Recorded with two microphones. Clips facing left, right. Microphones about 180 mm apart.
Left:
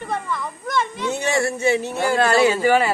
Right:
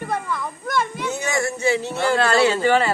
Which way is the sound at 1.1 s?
30° left (ahead or behind).